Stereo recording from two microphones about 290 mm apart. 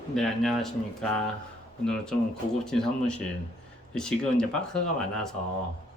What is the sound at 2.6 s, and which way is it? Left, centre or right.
Speech, centre.